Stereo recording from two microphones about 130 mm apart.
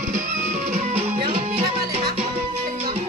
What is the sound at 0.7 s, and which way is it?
Music, 50° right (ahead or behind).